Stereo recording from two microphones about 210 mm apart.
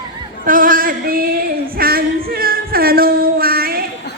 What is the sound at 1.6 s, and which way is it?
Singing, 45° right (ahead or behind).